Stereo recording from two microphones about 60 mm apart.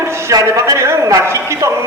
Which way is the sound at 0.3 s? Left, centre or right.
Right.